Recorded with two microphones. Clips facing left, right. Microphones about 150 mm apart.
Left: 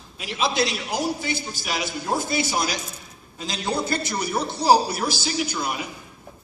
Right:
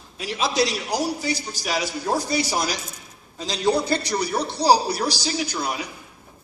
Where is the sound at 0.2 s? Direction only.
40° right (ahead or behind).